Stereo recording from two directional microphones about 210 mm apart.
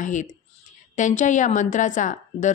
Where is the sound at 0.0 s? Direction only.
35° left (ahead or behind).